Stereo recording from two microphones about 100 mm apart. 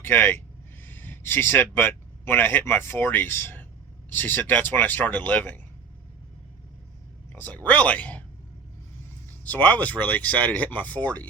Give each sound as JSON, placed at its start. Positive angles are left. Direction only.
{"t": 0.0, "sound": "speech", "side_deg": 20}
{"t": 7.3, "sound": "speech", "side_deg": 15}
{"t": 9.4, "sound": "speech", "side_deg": 15}